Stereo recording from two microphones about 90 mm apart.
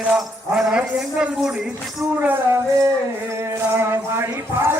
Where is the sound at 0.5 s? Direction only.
10° right (ahead or behind).